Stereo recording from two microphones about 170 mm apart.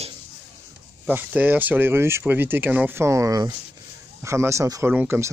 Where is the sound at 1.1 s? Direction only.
10° right (ahead or behind).